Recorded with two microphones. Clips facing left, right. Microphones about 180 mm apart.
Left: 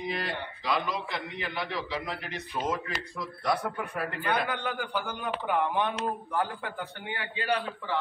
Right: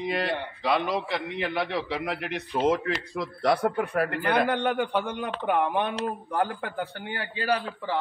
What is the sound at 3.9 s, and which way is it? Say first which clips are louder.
A man's voice: right 3 dB; 65° right (ahead or behind).